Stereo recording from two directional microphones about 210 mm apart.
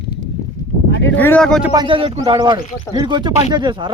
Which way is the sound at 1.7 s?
25° right (ahead or behind).